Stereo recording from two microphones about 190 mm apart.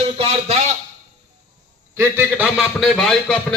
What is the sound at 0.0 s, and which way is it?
Speech, 30° right (ahead or behind).